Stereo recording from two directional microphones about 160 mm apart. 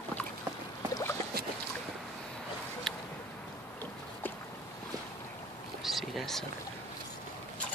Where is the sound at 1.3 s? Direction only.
70° right (ahead or behind).